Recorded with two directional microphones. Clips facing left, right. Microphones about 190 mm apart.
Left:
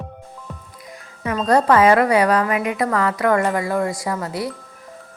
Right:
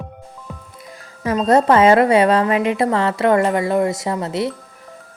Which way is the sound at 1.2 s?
20° right (ahead or behind).